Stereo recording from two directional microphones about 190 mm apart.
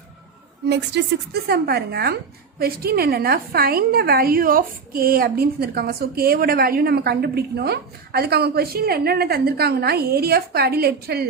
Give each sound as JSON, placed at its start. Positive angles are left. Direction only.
{"t": 0.7, "sound": "a woman's voice", "side_deg": -65}